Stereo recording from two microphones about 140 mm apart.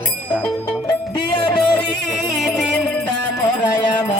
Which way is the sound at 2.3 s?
Centre (ahead or behind).